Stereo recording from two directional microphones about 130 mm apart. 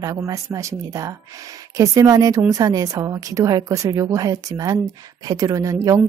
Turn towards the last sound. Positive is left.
turn(degrees=-25)  # may be behind; listen again after turning